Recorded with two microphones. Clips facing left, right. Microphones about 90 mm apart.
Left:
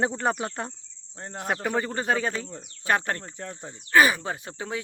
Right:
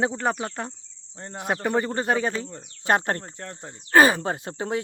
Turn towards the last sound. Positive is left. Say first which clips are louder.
# right 5 dB
turn(degrees=-40)  # may be behind; listen again after turning